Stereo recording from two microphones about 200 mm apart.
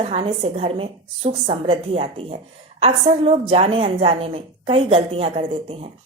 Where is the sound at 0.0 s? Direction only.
30° right (ahead or behind).